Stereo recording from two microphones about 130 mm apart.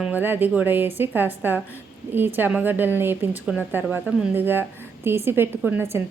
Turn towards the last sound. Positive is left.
turn(degrees=-20)  # may be behind; listen again after turning